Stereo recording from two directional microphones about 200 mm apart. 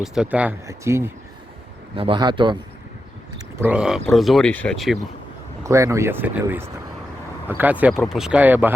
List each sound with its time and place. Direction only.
0.0 s speech: 5° right (ahead or behind)
2.0 s a man's voice: 25° right (ahead or behind)
3.6 s speech: 5° right (ahead or behind)
5.6 s speech: 15° right (ahead or behind)